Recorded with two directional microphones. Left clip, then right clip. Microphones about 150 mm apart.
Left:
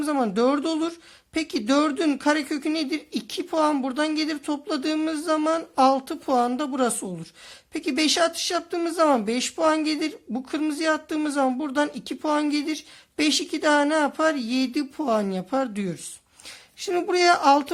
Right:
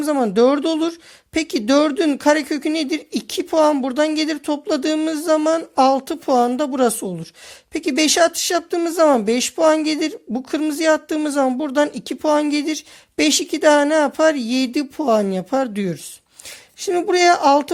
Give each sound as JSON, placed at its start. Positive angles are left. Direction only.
{"t": 0.0, "sound": "speech", "side_deg": -40}